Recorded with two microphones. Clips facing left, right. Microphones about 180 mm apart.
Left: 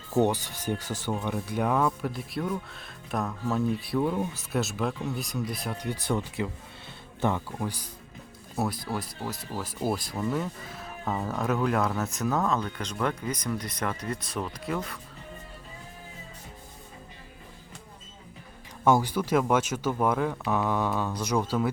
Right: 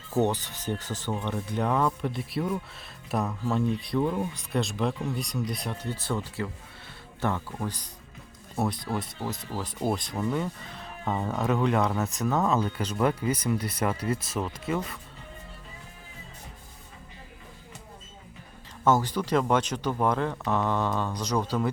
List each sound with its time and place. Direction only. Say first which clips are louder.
0.1 s speech: left 1 dB; 10° left (ahead or behind)
5.7 s speech: left 2 dB; 15° left (ahead or behind)
18.9 s speech: left 1 dB; 10° left (ahead or behind)